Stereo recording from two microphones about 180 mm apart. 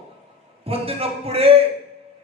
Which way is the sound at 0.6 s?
35° right (ahead or behind).